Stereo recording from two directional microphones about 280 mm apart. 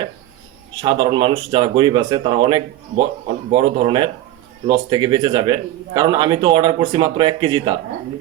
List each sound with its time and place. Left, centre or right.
0.8 s a man's voice: centre